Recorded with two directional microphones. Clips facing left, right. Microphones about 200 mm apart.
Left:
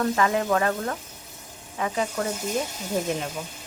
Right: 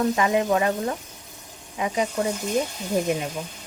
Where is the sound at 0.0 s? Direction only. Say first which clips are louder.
Right 2 dB; 15° right (ahead or behind).